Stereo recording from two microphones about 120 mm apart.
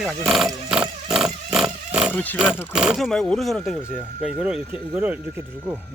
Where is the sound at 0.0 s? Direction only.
5° right (ahead or behind).